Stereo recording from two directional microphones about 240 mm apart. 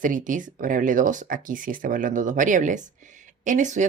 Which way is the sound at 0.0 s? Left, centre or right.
Right.